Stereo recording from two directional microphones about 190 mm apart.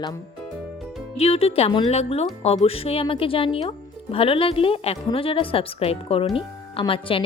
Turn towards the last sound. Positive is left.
turn(degrees=30)  # may be behind; listen again after turning